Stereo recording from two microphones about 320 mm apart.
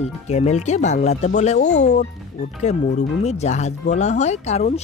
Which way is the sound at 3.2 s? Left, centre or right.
Centre.